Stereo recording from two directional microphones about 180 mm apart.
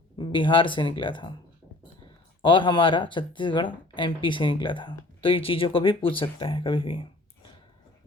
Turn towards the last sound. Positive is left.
turn(degrees=30)  # may be behind; listen again after turning